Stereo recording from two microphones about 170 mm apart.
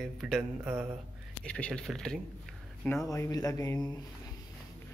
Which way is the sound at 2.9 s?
20° left (ahead or behind).